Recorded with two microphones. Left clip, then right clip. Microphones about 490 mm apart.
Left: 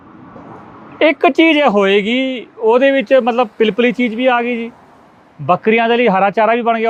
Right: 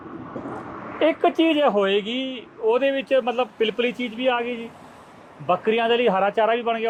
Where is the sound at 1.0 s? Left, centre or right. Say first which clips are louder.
Left 8 dB; left.